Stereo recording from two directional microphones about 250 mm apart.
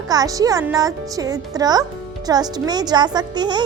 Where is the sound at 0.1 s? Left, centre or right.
Centre.